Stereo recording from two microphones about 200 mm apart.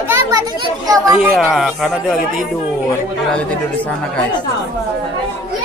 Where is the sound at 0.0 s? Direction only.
15° right (ahead or behind).